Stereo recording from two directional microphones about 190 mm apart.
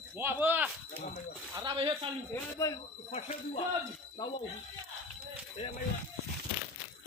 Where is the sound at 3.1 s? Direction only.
35° left (ahead or behind).